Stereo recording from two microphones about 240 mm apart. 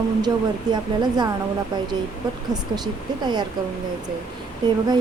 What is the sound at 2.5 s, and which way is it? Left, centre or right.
Speech, centre.